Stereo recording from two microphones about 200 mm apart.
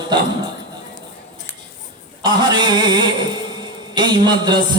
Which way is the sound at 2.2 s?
20° right (ahead or behind).